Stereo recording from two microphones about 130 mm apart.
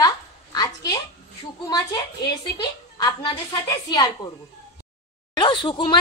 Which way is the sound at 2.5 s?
35° left (ahead or behind).